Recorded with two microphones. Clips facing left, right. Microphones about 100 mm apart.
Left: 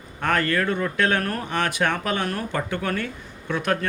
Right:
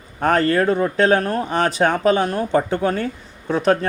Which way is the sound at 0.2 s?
35° right (ahead or behind).